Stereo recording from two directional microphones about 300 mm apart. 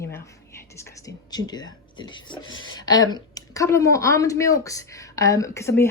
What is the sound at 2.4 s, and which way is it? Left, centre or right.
Speech, left.